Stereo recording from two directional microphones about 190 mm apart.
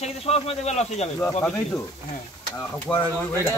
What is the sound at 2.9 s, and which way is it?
Speech, 5° left (ahead or behind).